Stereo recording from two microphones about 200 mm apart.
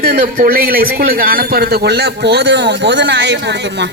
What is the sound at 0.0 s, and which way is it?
Speech, 50° right (ahead or behind).